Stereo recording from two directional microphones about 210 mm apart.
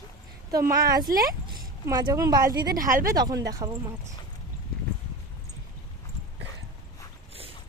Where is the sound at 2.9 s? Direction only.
40° right (ahead or behind).